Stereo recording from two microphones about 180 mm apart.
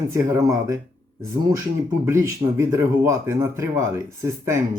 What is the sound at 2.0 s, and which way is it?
Speech, 15° right (ahead or behind).